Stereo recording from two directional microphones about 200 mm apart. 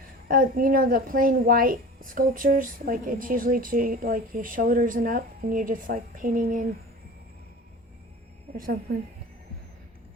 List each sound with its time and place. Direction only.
0.3 s speech: 45° right (ahead or behind)
8.5 s speech: 45° right (ahead or behind)